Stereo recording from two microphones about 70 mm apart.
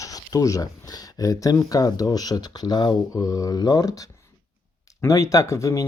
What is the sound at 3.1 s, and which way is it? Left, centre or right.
Speech, left.